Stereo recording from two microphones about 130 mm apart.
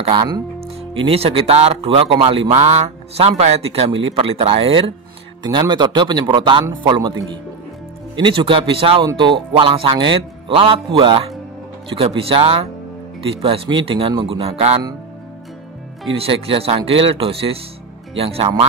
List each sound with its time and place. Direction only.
0.0 s speech: 45° right (ahead or behind)
5.4 s speech: 35° right (ahead or behind)
8.2 s speech: 40° right (ahead or behind)
16.2 s speech: 50° right (ahead or behind)